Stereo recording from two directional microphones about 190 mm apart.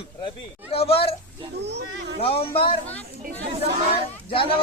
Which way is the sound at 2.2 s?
30° left (ahead or behind).